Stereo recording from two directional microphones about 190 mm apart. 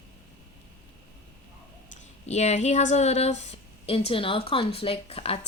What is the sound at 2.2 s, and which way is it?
Speech, 35° left (ahead or behind).